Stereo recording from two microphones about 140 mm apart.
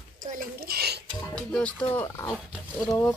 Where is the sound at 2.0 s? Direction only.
20° left (ahead or behind).